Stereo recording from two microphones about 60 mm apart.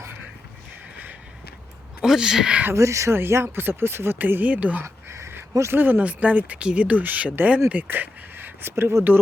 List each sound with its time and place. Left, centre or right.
2.0 s speech: centre
2.7 s speech: right
3.2 s speech: right
4.2 s speech: right
4.8 s speech: right
5.7 s speech: right